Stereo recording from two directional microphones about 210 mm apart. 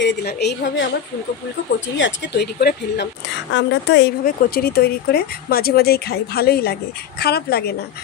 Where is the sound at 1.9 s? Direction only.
55° left (ahead or behind).